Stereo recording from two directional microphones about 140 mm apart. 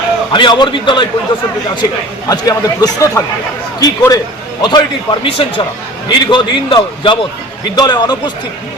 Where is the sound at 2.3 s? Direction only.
25° left (ahead or behind).